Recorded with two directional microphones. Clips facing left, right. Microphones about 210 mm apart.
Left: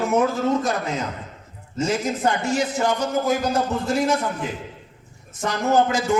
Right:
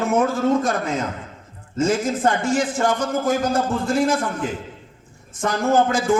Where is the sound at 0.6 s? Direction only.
50° right (ahead or behind).